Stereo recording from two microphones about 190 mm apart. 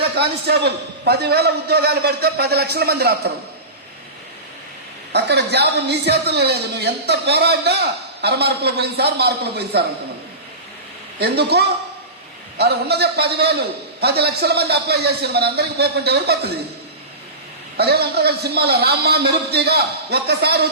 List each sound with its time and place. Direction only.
0.2 s a man's voice: 60° right (ahead or behind)
5.1 s a man's voice: 60° right (ahead or behind)
11.2 s a man's voice: 60° right (ahead or behind)
17.7 s a man's voice: 55° right (ahead or behind)